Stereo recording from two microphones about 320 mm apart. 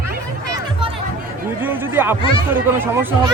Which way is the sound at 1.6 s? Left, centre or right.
Centre.